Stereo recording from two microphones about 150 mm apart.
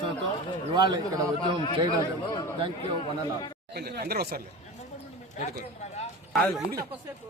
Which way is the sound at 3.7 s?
90° right.